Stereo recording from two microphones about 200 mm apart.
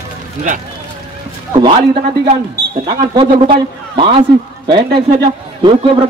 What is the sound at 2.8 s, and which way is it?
A man's voice, 25° right (ahead or behind).